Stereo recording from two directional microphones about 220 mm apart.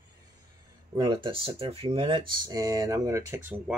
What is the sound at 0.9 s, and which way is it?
Speech, 20° right (ahead or behind).